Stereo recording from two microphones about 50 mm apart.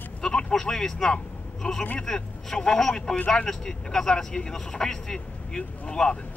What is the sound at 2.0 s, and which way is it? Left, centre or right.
Speech, centre.